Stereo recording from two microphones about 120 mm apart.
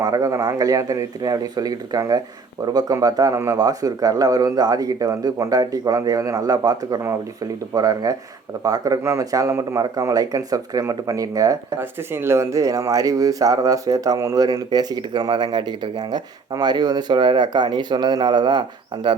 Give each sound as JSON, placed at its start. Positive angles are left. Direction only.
{"t": 0.0, "sound": "speech", "side_deg": -30}